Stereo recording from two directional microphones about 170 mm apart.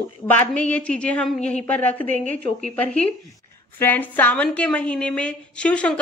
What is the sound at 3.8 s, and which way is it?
A woman's voice, 10° left (ahead or behind).